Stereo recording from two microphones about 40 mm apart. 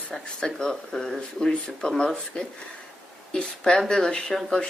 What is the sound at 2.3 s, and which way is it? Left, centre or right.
A woman's voice, left.